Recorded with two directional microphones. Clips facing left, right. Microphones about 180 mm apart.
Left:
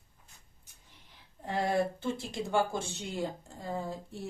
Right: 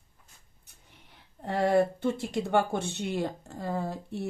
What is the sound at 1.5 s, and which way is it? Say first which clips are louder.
Speech: right 5 dB; 60° right (ahead or behind).